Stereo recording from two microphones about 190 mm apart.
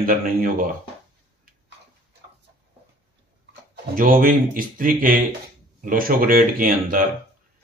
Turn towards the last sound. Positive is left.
turn(degrees=-50)  # may be behind; listen again after turning